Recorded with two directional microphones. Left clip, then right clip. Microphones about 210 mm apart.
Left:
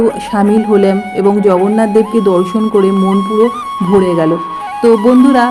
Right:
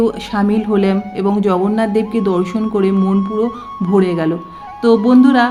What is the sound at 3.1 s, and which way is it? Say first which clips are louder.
Speech: left 7 dB; 55° left (ahead or behind).